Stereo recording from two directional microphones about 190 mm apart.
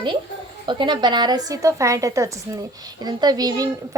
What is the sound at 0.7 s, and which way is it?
A woman's voice, 25° right (ahead or behind).